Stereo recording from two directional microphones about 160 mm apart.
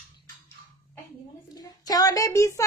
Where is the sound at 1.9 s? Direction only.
20° left (ahead or behind).